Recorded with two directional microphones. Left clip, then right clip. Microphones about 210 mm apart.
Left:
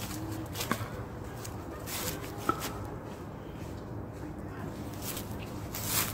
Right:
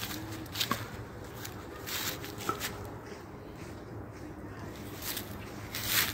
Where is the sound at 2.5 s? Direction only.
45° right (ahead or behind).